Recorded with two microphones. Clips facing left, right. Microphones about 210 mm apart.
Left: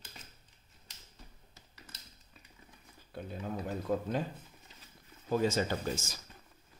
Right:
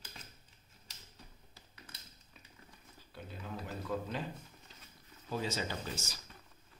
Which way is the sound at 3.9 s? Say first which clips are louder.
Left 5 dB; 50° left (ahead or behind).